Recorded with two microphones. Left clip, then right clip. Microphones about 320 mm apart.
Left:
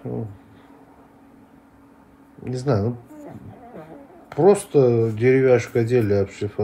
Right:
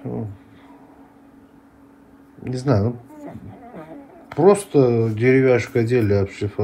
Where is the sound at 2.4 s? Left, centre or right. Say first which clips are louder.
Right 2 dB; centre.